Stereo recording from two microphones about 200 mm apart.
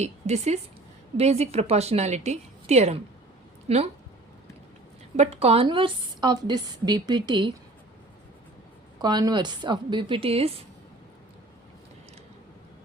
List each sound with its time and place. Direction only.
0.0 s a woman's voice: 35° right (ahead or behind)
5.1 s a woman's voice: 35° right (ahead or behind)
9.0 s a woman's voice: 20° right (ahead or behind)